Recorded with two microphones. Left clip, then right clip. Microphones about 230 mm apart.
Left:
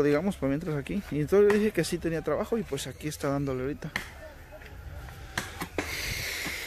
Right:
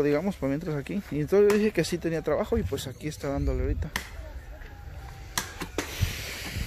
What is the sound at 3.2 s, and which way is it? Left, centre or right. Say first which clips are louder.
Speech: left 1 dB; centre.